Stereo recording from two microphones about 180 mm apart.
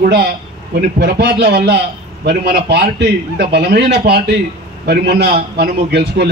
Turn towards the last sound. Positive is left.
turn(degrees=-65)  # may be behind; listen again after turning